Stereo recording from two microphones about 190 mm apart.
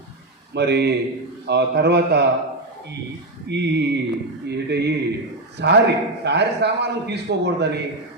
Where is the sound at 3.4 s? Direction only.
65° right (ahead or behind).